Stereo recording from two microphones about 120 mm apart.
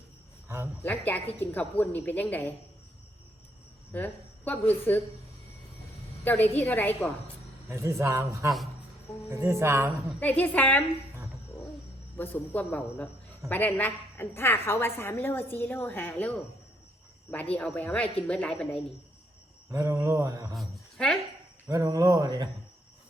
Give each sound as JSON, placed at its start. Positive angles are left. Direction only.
{"t": 0.4, "sound": "speech", "side_deg": -20}
{"t": 0.8, "sound": "a woman's voice", "side_deg": 15}
{"t": 3.9, "sound": "a woman's voice", "side_deg": 15}
{"t": 6.2, "sound": "a woman's voice", "side_deg": 15}
{"t": 7.7, "sound": "a man's voice", "side_deg": -25}
{"t": 10.2, "sound": "a woman's voice", "side_deg": 15}
{"t": 12.1, "sound": "a woman's voice", "side_deg": 15}
{"t": 17.7, "sound": "a woman's voice", "side_deg": 10}
{"t": 19.7, "sound": "a man's voice", "side_deg": -25}
{"t": 20.6, "sound": "speech", "side_deg": 5}
{"t": 21.7, "sound": "speech", "side_deg": -30}